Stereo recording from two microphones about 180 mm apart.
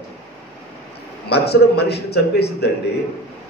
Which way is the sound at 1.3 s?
65° left (ahead or behind).